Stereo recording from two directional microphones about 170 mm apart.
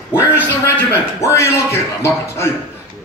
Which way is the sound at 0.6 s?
15° left (ahead or behind).